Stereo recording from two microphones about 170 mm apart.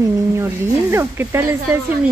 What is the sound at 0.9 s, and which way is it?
Speech, 15° right (ahead or behind).